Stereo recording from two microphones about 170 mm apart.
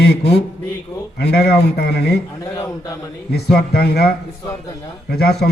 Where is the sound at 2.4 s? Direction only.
20° left (ahead or behind).